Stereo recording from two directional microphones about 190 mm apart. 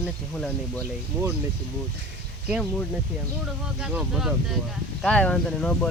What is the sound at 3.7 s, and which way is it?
Speech, 5° right (ahead or behind).